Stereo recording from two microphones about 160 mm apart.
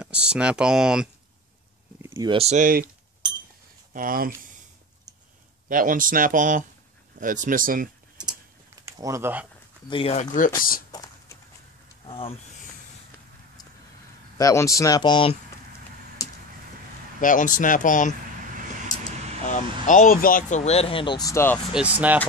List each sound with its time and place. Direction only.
0.0 s speech: 5° right (ahead or behind)
2.0 s a sound: 15° right (ahead or behind)
2.2 s speech: 35° right (ahead or behind)
2.5 s speech: 60° right (ahead or behind)
3.9 s speech: 60° right (ahead or behind)
5.7 s speech: 60° right (ahead or behind)
8.8 s speech: 20° right (ahead or behind)
9.8 s speech: 35° left (ahead or behind)
12.1 s speech: 35° left (ahead or behind)
14.4 s speech: 20° left (ahead or behind)
16.2 s a sound: 20° left (ahead or behind)
17.2 s speech: 55° left (ahead or behind)
19.4 s speech: 50° left (ahead or behind); by 21.5 s 20° left (ahead or behind)
21.7 s speech: 10° right (ahead or behind)